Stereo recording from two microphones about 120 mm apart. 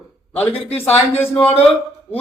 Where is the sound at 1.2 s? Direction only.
15° left (ahead or behind).